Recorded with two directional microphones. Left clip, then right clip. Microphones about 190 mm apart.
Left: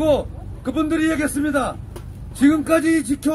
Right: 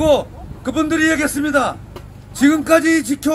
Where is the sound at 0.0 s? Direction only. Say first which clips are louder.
Right 4 dB; 30° right (ahead or behind).